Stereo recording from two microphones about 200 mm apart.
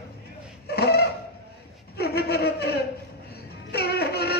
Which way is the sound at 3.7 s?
55° left (ahead or behind).